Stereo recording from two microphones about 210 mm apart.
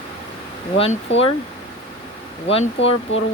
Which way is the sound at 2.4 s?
30° left (ahead or behind).